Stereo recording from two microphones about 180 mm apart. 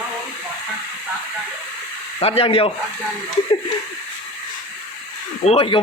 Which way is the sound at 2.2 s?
35° left (ahead or behind).